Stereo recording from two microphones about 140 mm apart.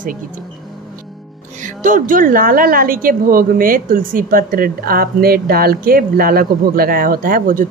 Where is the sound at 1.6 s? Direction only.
70° right (ahead or behind).